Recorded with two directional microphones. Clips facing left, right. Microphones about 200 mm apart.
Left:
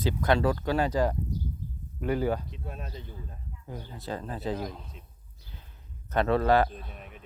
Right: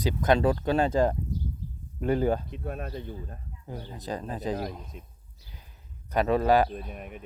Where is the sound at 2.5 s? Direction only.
55° right (ahead or behind).